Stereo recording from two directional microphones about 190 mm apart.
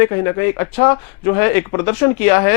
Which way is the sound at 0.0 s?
20° left (ahead or behind).